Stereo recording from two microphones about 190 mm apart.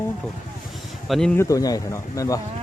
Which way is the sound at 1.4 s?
15° left (ahead or behind).